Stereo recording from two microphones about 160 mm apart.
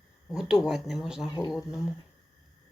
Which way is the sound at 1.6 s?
15° left (ahead or behind).